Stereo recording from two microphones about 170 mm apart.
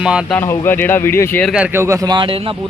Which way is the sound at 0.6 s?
15° left (ahead or behind).